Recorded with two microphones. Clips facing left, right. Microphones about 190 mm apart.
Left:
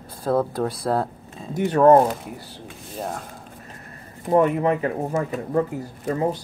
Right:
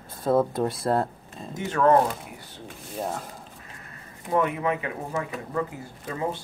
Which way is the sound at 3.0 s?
Centre (ahead or behind).